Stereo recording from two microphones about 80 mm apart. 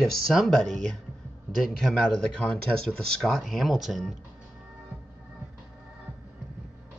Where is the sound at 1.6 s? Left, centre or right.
Centre.